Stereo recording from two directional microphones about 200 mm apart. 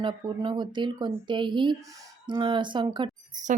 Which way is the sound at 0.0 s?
25° right (ahead or behind).